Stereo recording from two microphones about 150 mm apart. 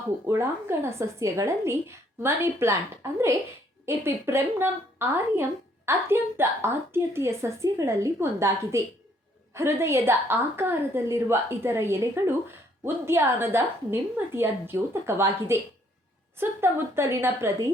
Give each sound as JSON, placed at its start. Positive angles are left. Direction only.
{"t": 0.3, "sound": "speech", "side_deg": -15}